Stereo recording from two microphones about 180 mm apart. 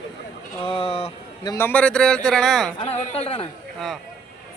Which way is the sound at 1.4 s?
15° left (ahead or behind).